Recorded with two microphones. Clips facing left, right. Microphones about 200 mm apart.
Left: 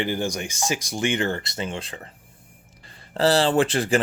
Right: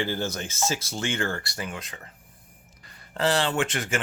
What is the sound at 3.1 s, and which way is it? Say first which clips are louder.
Speech: left 6 dB; 35° left (ahead or behind).